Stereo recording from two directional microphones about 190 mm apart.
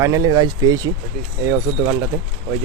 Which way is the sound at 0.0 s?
20° right (ahead or behind).